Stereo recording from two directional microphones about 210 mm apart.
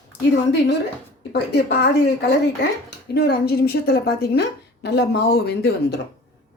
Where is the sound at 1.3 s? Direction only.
50° left (ahead or behind).